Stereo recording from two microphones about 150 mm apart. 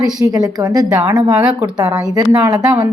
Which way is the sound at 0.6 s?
25° right (ahead or behind).